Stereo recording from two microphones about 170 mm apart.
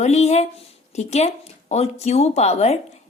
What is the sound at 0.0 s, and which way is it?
A woman's voice, 40° left (ahead or behind).